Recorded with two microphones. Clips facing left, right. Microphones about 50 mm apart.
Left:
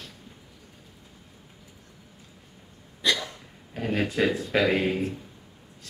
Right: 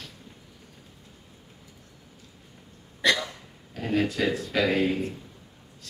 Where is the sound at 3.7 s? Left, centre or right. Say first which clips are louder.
Even; left.